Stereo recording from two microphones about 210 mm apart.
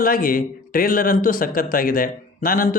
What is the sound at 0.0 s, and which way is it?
Speech, 40° left (ahead or behind).